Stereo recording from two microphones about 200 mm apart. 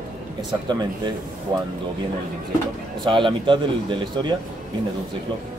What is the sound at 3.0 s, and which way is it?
Speech, 25° right (ahead or behind).